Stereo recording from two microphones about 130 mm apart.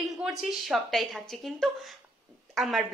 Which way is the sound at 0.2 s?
5° right (ahead or behind).